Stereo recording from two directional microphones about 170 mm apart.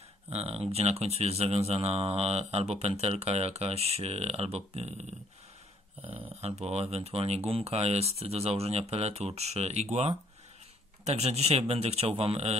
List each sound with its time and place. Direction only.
0.3 s speech: 35° right (ahead or behind)
6.4 s speech: 40° right (ahead or behind)